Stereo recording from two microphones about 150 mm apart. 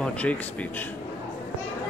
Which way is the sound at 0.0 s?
10° left (ahead or behind).